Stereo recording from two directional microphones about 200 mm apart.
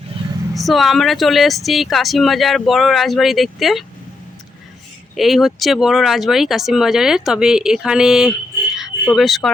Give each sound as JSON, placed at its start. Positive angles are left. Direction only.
{"t": 0.1, "sound": "vehicle", "side_deg": -25}
{"t": 0.5, "sound": "speech", "side_deg": 0}
{"t": 5.1, "sound": "speech", "side_deg": 0}
{"t": 8.7, "sound": "a sound", "side_deg": 0}